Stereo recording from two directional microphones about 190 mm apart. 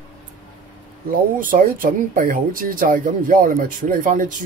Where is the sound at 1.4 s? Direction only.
45° right (ahead or behind).